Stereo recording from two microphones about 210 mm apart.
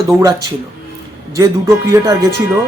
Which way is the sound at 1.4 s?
15° right (ahead or behind).